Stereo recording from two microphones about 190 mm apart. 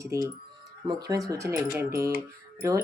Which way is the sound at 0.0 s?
15° right (ahead or behind).